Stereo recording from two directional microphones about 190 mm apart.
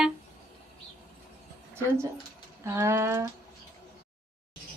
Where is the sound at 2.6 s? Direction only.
15° right (ahead or behind).